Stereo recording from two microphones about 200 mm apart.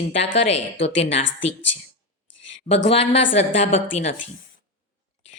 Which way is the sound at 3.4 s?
35° left (ahead or behind).